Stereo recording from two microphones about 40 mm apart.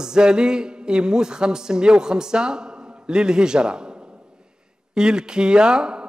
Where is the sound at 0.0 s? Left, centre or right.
Centre.